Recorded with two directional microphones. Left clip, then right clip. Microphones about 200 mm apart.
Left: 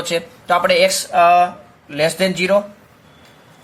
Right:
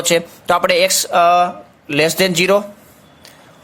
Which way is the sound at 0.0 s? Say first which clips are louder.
Right 5 dB; 40° right (ahead or behind).